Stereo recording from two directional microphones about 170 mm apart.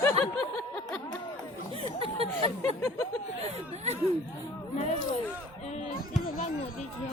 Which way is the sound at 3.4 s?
40° right (ahead or behind).